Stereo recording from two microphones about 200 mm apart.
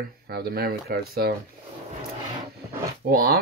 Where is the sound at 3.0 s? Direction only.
50° right (ahead or behind).